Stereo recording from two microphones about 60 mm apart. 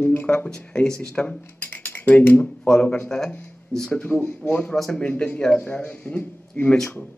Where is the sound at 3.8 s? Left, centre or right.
Left.